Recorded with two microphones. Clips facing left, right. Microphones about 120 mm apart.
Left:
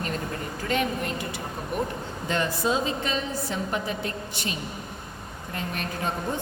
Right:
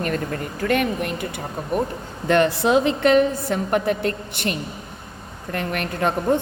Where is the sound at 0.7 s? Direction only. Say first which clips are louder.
Right 5 dB; 60° right (ahead or behind).